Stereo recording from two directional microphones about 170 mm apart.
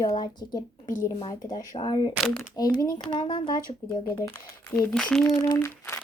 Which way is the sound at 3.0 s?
25° left (ahead or behind).